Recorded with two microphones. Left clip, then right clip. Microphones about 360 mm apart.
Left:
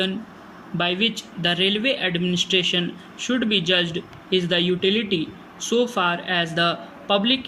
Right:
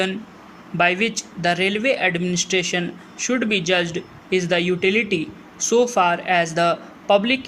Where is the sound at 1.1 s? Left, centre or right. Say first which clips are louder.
Right 2 dB; centre.